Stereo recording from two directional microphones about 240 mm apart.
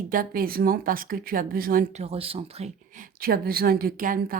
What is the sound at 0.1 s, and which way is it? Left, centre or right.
Speech, right.